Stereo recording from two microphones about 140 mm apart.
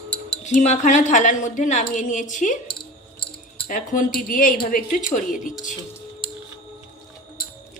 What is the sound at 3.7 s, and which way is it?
Speech, 75° left (ahead or behind).